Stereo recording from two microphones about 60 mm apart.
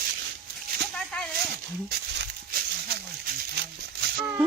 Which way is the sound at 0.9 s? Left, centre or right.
Centre.